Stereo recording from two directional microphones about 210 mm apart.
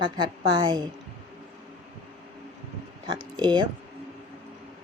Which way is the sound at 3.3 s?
20° right (ahead or behind).